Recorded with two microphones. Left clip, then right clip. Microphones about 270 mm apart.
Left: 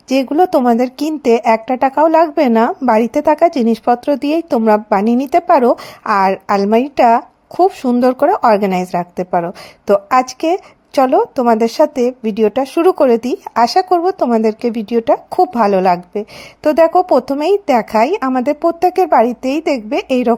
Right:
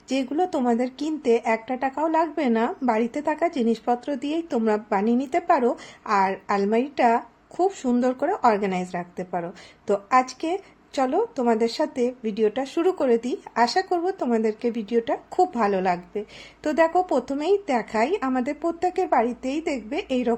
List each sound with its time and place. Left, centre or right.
0.1 s speech: left